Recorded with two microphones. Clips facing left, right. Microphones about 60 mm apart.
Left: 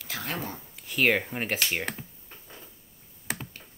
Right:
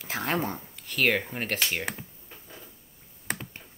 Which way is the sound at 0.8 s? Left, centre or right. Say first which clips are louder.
Left 1 dB; centre.